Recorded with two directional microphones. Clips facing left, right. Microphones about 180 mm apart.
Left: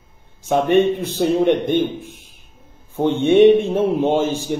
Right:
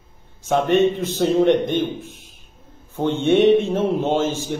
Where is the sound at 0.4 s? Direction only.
10° left (ahead or behind).